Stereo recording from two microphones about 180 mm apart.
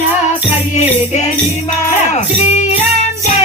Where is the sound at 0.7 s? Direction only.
40° left (ahead or behind).